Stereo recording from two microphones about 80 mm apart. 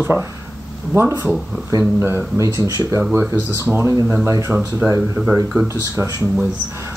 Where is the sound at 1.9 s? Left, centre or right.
Right.